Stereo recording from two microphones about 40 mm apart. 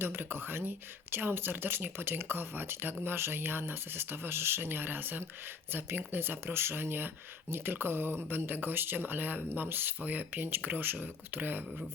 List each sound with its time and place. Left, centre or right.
0.0 s speech: right
3.0 s speech: right
9.6 s speech: right
10.0 s speech: right
10.6 s speech: right
11.3 s speech: right